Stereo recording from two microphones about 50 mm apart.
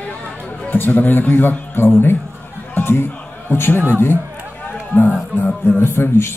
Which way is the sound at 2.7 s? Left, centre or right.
Left.